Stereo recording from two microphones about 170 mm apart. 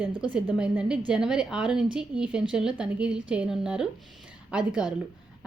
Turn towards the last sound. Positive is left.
turn(degrees=-5)  # may be behind; listen again after turning